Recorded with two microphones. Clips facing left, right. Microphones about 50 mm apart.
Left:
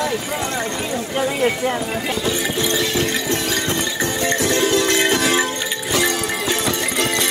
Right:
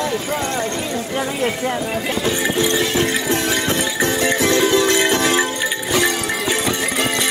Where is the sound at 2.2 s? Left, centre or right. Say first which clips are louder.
Right 5 dB; centre.